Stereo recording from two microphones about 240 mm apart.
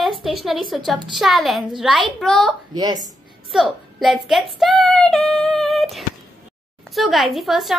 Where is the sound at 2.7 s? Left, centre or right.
Centre.